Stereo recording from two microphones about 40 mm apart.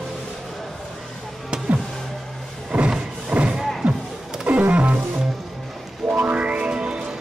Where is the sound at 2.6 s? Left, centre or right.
Right.